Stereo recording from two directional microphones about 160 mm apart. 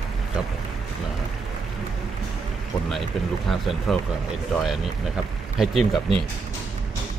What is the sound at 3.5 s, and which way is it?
Speech, centre (ahead or behind).